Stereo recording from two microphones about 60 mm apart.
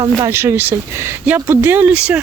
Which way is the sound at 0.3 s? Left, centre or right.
Right.